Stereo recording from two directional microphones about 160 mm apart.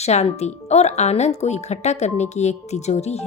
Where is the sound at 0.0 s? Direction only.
45° left (ahead or behind).